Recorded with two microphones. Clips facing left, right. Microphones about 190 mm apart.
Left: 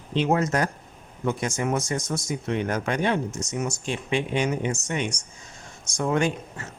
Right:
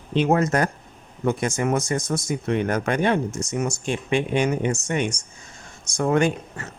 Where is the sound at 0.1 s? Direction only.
55° right (ahead or behind).